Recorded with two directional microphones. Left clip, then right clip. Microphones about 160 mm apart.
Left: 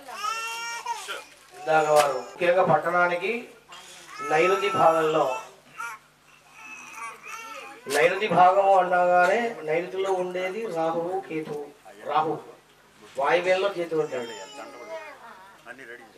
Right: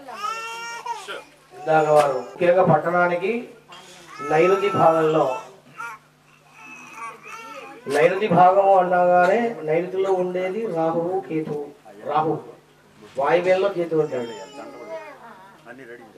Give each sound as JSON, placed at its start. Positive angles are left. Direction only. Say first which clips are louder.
{"t": 0.0, "sound": "baby cry", "louder": "right 1 dB", "side_deg": -10}
{"t": 2.3, "sound": "speech", "louder": "right 4 dB", "side_deg": -15}
{"t": 7.4, "sound": "speech", "louder": "right 6 dB", "side_deg": -10}
{"t": 11.0, "sound": "speech", "louder": "right 5 dB", "side_deg": -25}
{"t": 11.2, "sound": "speech", "louder": "right 5 dB", "side_deg": -15}
{"t": 11.5, "sound": "a sound", "louder": "right 5 dB", "side_deg": -25}
{"t": 12.3, "sound": "a man's voice", "louder": "right 5 dB", "side_deg": -35}
{"t": 13.1, "sound": "speech", "louder": "right 4 dB", "side_deg": -10}
{"t": 14.1, "sound": "cat", "louder": "right 4 dB", "side_deg": -10}
{"t": 14.9, "sound": "a sound", "louder": "right 3 dB", "side_deg": -10}